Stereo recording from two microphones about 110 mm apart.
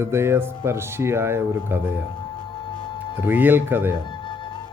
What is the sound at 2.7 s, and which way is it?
Music, 50° left (ahead or behind).